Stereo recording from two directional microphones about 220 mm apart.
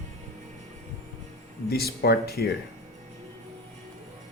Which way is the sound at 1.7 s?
45° left (ahead or behind).